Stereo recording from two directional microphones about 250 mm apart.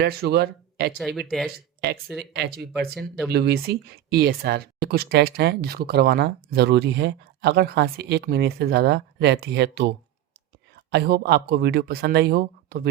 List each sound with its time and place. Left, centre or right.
0.0 s speech: right
0.9 s speech: centre
2.3 s speech: right
2.9 s speech: centre
3.2 s speech: right
10.9 s speech: right